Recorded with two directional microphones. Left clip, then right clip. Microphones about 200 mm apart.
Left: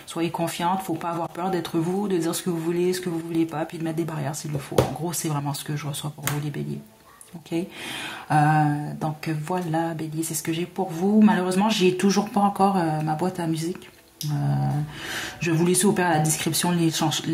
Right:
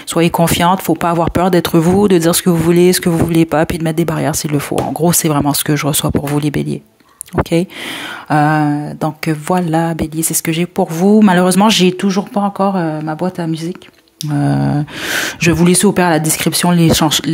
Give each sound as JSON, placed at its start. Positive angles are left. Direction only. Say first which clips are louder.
{"t": 0.1, "sound": "speech", "louder": "right 14 dB", "side_deg": -45}
{"t": 8.3, "sound": "speech", "louder": "right 8 dB", "side_deg": -35}
{"t": 12.0, "sound": "speech", "louder": "right 5 dB", "side_deg": -30}
{"t": 14.3, "sound": "speech", "louder": "right 13 dB", "side_deg": -45}